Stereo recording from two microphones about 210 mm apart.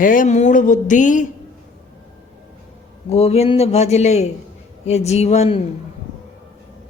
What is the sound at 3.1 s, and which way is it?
Speech, 30° left (ahead or behind).